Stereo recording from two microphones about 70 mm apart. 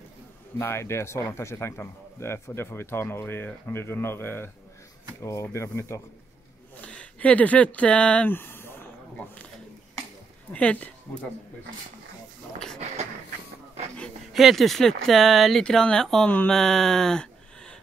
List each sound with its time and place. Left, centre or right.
0.6 s a man's voice: left
5.2 s speech: left
6.8 s speech: centre
8.3 s a sound: left
10.5 s speech: centre
14.3 s speech: centre